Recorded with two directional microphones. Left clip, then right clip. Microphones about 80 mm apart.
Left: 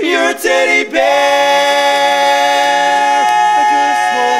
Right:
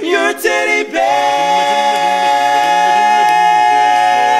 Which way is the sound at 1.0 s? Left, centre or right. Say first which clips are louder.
Left 2 dB; left.